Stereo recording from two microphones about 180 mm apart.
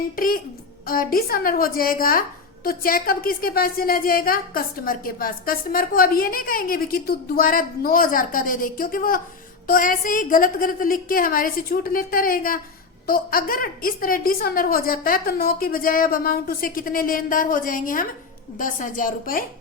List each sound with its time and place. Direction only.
0.9 s a woman's voice: 55° left (ahead or behind)